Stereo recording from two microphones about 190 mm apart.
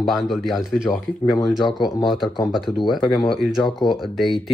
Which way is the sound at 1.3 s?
20° left (ahead or behind).